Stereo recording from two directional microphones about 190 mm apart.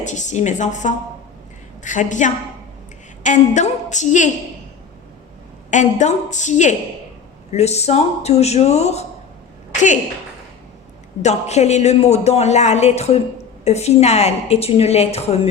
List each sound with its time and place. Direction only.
0.0 s speech: 40° left (ahead or behind)
5.7 s speech: 40° left (ahead or behind)
11.2 s speech: 35° left (ahead or behind)